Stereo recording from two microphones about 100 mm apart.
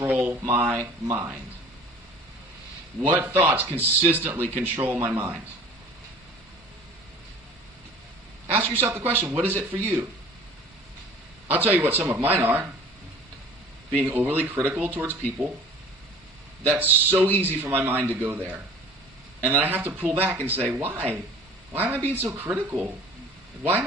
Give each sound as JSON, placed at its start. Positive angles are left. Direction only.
{"t": 0.1, "sound": "speech", "side_deg": -15}
{"t": 3.0, "sound": "speech", "side_deg": -20}
{"t": 8.4, "sound": "speech", "side_deg": -20}
{"t": 11.4, "sound": "speech", "side_deg": -20}
{"t": 14.0, "sound": "speech", "side_deg": -20}
{"t": 16.6, "sound": "speech", "side_deg": -20}